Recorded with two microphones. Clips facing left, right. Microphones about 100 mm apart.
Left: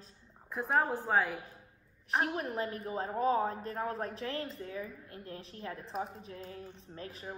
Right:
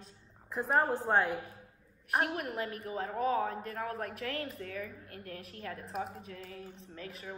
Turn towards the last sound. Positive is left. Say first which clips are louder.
# left 1 dB
turn(degrees=35)  # may be behind; listen again after turning